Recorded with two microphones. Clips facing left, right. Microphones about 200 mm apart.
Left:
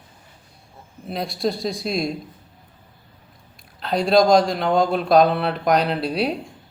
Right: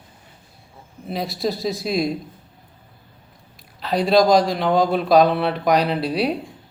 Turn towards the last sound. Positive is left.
turn(degrees=0)  # may be behind; listen again after turning